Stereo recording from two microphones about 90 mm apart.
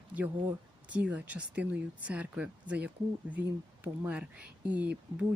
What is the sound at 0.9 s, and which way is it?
Speech, 15° right (ahead or behind).